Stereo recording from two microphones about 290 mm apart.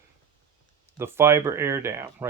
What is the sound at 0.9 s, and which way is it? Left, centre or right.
Speech, centre.